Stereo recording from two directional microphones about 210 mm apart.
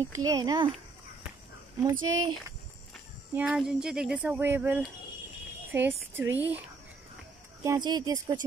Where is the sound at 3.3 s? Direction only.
5° right (ahead or behind).